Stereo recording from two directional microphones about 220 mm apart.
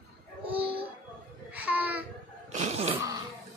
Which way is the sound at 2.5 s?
30° right (ahead or behind).